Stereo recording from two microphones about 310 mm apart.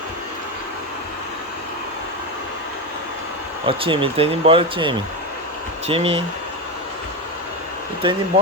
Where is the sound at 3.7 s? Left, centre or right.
Centre.